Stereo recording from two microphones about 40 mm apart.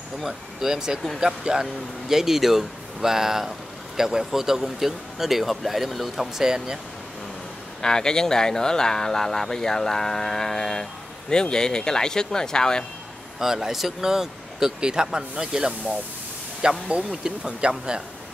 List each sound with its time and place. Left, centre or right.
0.2 s speech: centre
6.3 s speech: centre
7.8 s speech: centre
13.4 s speech: centre
16.6 s speech: right